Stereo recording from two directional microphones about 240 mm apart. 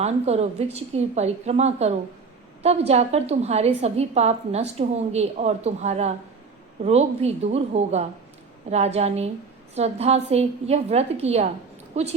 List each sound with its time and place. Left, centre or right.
0.0 s a woman's voice: right